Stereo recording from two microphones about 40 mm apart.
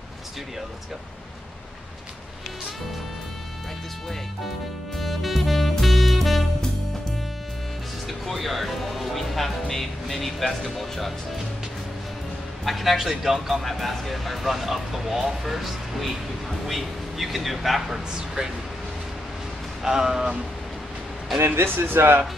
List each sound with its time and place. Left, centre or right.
4.9 s music: centre
8.1 s speech: centre
12.6 s speech: centre
19.8 s speech: centre
21.7 s speech: right